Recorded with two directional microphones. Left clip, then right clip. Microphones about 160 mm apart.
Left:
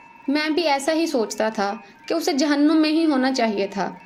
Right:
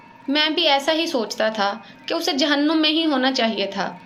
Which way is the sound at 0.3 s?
50° left (ahead or behind).